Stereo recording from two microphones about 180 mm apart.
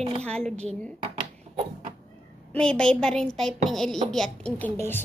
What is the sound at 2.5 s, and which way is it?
A woman's voice, 5° left (ahead or behind).